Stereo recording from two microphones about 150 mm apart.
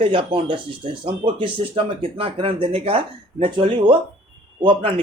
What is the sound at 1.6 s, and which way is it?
A man's voice, 35° right (ahead or behind).